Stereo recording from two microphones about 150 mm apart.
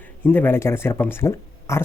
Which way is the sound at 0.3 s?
15° left (ahead or behind).